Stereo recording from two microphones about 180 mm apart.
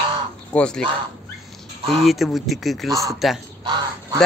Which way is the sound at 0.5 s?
5° left (ahead or behind).